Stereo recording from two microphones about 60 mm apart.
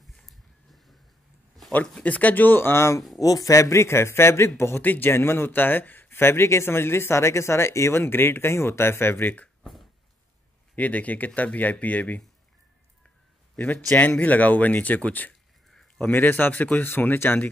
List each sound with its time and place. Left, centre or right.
0.0 s a sound: centre
2.0 s speech: left
3.2 s speech: left
4.8 s speech: left
5.1 s speech: left
9.6 s a sound: centre
10.8 s speech: left
13.6 s speech: left